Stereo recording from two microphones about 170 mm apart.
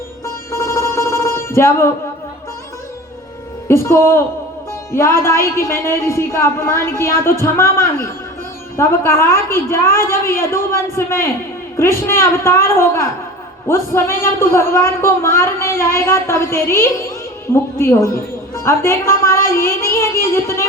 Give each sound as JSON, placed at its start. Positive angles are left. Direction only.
{"t": 0.5, "sound": "telephone bell ringing", "side_deg": 15}
{"t": 3.7, "sound": "a man's voice", "side_deg": 15}